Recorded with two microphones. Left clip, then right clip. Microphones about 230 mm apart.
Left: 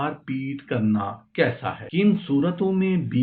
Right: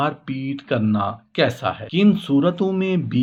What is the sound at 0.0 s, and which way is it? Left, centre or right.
Speech, right.